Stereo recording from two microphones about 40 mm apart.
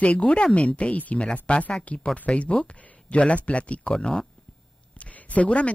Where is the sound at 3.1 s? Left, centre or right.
Left.